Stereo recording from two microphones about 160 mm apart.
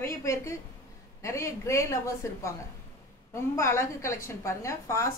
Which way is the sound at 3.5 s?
15° left (ahead or behind).